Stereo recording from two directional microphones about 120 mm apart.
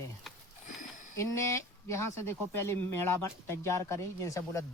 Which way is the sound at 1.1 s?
25° left (ahead or behind).